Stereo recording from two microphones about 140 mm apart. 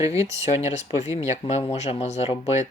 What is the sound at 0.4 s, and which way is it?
Speech, 50° left (ahead or behind).